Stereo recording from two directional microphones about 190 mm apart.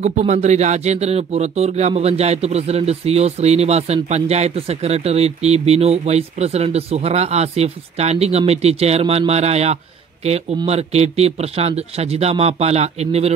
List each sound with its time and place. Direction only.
0.0 s speech: 35° right (ahead or behind)